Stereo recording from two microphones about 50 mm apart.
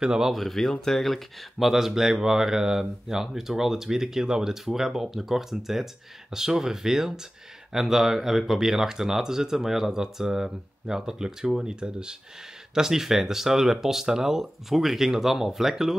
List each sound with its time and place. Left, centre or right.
0.0 s speech: centre
0.3 s speech: centre
1.7 s speech: centre